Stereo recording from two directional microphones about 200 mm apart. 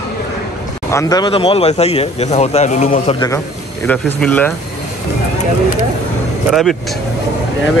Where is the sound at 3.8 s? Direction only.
5° left (ahead or behind).